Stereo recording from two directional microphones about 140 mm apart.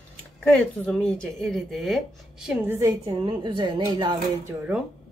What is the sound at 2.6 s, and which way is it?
A woman's voice, 20° right (ahead or behind).